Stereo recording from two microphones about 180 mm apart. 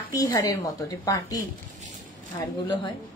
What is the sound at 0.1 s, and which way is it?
A woman's voice, 20° left (ahead or behind).